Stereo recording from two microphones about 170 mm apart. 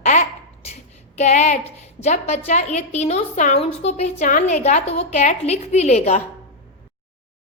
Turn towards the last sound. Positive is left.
turn(degrees=40)  # may be behind; listen again after turning